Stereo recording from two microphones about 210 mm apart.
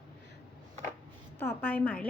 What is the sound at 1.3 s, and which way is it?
Speech, 10° left (ahead or behind).